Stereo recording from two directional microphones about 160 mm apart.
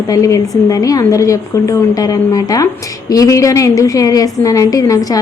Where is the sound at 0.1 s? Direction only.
20° left (ahead or behind).